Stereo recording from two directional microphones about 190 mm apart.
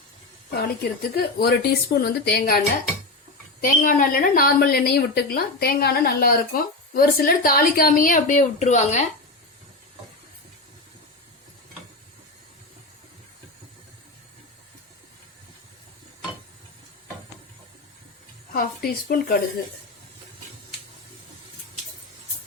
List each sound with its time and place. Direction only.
0.5 s speech: 55° left (ahead or behind)
3.6 s a woman's voice: 45° left (ahead or behind)
18.5 s a woman's voice: 50° left (ahead or behind)